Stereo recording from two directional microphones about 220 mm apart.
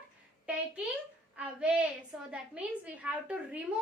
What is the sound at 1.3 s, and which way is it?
Child singing, 5° right (ahead or behind).